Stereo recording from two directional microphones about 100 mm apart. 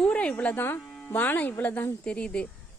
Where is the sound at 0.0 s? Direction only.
10° left (ahead or behind).